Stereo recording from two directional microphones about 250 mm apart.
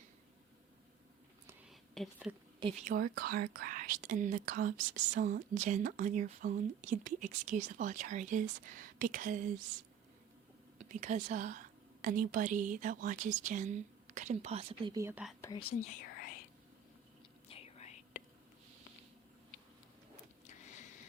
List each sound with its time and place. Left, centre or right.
1.5 s a sound: centre
2.6 s a woman's voice: right
10.8 s speech: right; by 15.4 s centre
15.4 s speech: centre
17.5 s whispering: left
20.7 s a sound: left